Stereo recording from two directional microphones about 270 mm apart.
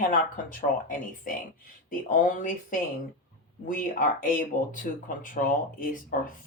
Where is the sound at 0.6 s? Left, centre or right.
Left.